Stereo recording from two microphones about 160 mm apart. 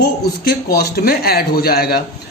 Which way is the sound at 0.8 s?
75° left (ahead or behind).